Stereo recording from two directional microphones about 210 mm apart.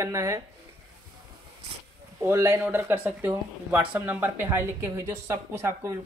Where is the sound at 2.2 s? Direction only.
10° right (ahead or behind).